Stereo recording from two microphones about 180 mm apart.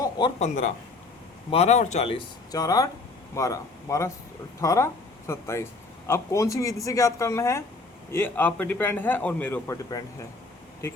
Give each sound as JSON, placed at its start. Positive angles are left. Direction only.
{"t": 0.3, "sound": "a man's voice", "side_deg": 40}